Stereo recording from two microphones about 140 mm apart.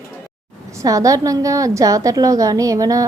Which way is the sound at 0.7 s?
25° right (ahead or behind).